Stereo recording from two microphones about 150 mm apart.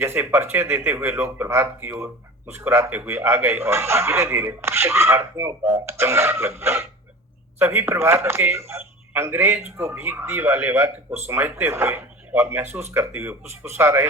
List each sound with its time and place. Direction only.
0.0 s a man's voice: 15° right (ahead or behind)